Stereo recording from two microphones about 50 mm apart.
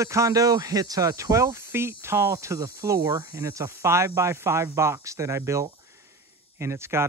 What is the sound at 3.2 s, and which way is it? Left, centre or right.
Speech, right.